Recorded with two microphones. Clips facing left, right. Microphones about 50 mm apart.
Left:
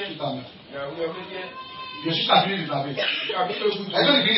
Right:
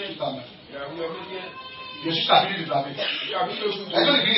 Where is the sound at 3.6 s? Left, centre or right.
Centre.